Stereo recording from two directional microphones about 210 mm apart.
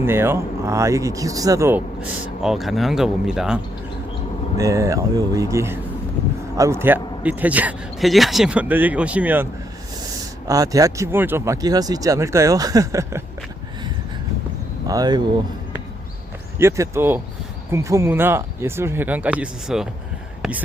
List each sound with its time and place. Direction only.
0.0 s speech: 10° right (ahead or behind)
4.5 s speech: 15° right (ahead or behind)
10.5 s speech: 15° right (ahead or behind)
14.8 s speech: 20° right (ahead or behind)
16.6 s speech: 15° right (ahead or behind)